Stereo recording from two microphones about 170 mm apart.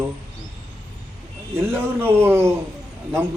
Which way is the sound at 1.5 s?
15° right (ahead or behind).